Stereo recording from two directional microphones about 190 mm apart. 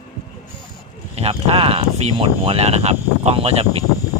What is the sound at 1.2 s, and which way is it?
Speech, 30° right (ahead or behind).